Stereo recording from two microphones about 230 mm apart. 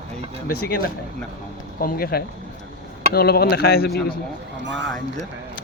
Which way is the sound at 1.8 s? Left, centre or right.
Left.